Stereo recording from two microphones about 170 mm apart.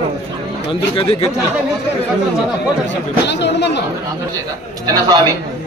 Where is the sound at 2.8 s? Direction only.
90° left.